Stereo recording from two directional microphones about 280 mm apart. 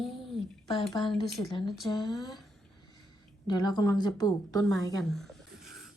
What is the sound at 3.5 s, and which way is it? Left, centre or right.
Speech, centre.